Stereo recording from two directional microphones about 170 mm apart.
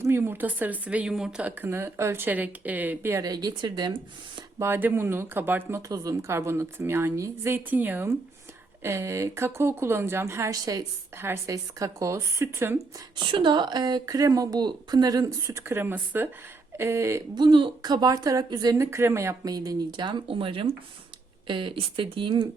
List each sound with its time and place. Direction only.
0.0 s speech: 15° right (ahead or behind)
4.6 s speech: 10° right (ahead or behind)
13.1 s a woman's voice: 30° right (ahead or behind)